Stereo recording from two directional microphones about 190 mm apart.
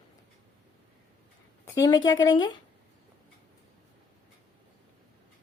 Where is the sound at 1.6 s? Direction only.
20° left (ahead or behind).